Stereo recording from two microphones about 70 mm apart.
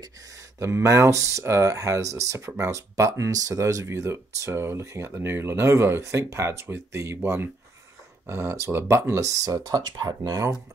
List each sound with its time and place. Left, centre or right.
0.6 s speech: right
8.3 s speech: right
9.2 s speech: right
9.6 s speech: right